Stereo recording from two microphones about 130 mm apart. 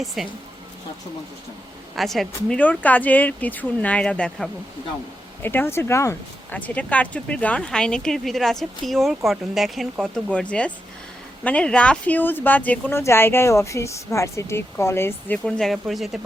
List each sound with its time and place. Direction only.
0.0 s speech: centre (ahead or behind)
2.0 s speech: centre (ahead or behind)
2.6 s speech: 10° left (ahead or behind)
15.4 s speech: 5° left (ahead or behind)